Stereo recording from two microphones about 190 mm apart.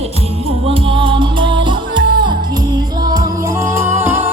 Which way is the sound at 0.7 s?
30° right (ahead or behind).